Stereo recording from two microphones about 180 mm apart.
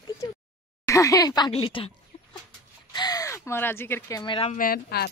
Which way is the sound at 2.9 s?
20° left (ahead or behind).